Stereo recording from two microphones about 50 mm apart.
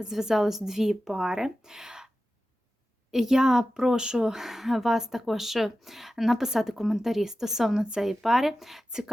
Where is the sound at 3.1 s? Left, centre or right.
Centre.